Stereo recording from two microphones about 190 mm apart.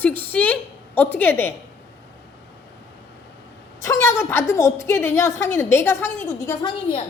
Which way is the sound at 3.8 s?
15° left (ahead or behind).